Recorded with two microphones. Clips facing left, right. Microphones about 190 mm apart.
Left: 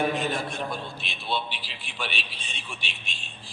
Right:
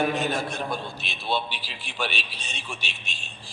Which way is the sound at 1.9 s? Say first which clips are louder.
Right 4 dB; 45° right (ahead or behind).